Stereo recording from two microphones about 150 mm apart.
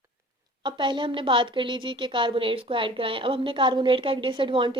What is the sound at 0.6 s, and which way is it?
A woman's voice, 30° right (ahead or behind).